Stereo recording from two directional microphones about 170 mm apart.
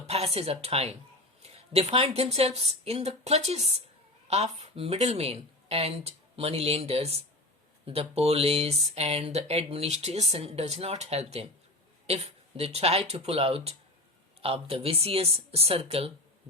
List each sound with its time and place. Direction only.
0.1 s speech: 35° right (ahead or behind)